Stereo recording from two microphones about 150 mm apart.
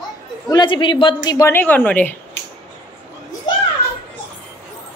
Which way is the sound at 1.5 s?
10° left (ahead or behind).